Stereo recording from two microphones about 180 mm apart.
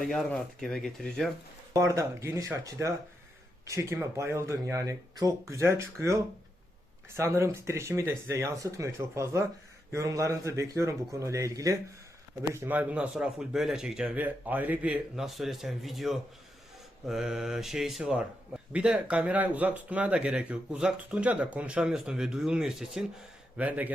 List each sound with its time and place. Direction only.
0.0 s speech: 5° left (ahead or behind)
1.7 s speech: 15° right (ahead or behind)